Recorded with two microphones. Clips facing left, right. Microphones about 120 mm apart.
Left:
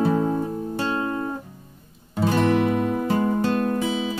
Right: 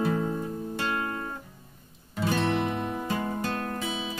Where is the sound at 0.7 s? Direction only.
20° left (ahead or behind).